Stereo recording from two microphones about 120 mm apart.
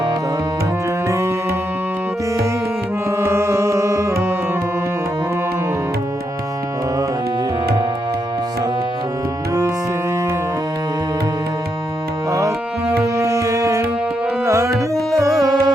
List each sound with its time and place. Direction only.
1.0 s music: 25° right (ahead or behind)
3.2 s music: 20° right (ahead or behind)
12.3 s music: 25° right (ahead or behind)